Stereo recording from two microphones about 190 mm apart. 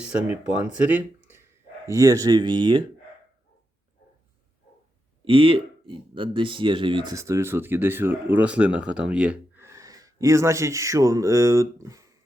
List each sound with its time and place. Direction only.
0.3 s speech: 10° right (ahead or behind); by 2.8 s 25° right (ahead or behind)
5.2 s speech: 30° right (ahead or behind)